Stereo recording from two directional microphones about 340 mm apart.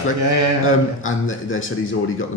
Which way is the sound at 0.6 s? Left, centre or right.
Left.